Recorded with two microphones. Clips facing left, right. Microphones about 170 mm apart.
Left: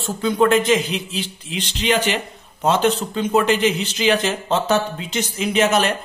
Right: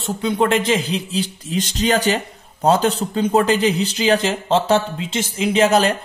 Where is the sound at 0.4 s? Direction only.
30° right (ahead or behind).